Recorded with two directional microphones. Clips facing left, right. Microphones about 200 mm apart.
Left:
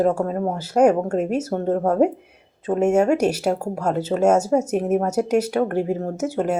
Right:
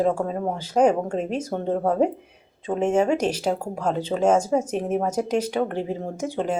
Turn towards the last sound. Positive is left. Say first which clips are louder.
# left 3 dB
turn(degrees=10)  # may be behind; listen again after turning